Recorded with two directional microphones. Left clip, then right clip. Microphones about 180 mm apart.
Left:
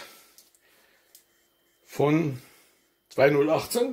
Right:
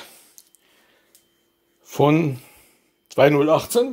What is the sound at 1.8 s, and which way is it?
Speech, 35° right (ahead or behind).